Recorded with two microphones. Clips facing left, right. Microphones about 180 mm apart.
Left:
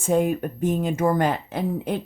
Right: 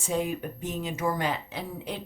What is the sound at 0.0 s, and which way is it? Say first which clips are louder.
Speech: left 8 dB; 50° left (ahead or behind).